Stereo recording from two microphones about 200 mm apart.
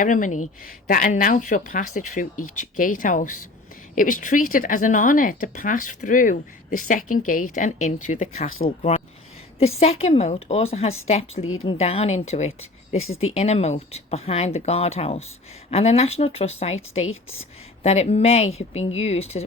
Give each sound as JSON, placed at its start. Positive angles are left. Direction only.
{"t": 0.0, "sound": "speech", "side_deg": 40}